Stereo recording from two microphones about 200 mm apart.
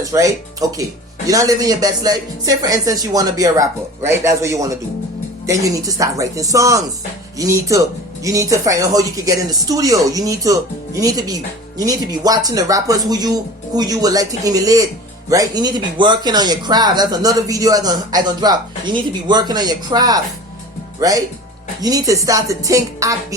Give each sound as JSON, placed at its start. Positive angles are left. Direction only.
{"t": 0.0, "sound": "speech", "side_deg": -15}